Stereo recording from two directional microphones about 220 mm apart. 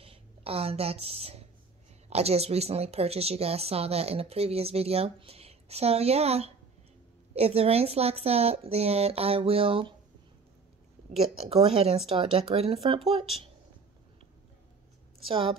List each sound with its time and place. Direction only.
0.0 s a woman's voice: 25° right (ahead or behind)
11.1 s a woman's voice: 25° right (ahead or behind)
15.2 s a woman's voice: 25° right (ahead or behind)